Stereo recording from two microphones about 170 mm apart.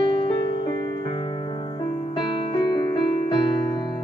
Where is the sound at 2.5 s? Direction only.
25° left (ahead or behind).